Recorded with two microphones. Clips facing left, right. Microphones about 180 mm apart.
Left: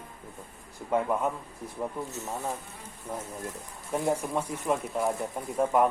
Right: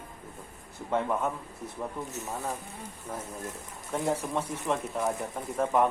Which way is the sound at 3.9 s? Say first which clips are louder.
Left 2 dB; 10° left (ahead or behind).